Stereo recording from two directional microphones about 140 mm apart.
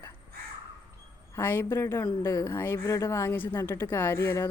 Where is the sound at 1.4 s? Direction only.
15° left (ahead or behind).